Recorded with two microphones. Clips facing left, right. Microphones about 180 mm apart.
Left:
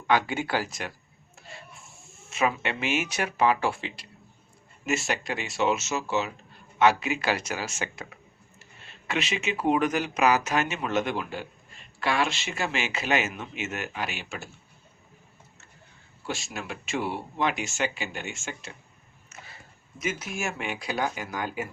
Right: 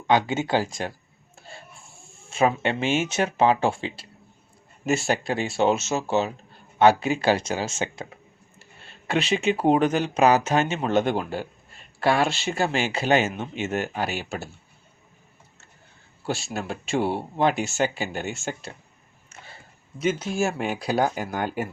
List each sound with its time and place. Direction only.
0.1 s speech: 25° right (ahead or behind)
16.2 s speech: 35° right (ahead or behind)
20.0 s speech: 30° right (ahead or behind)
21.2 s speech: 55° right (ahead or behind)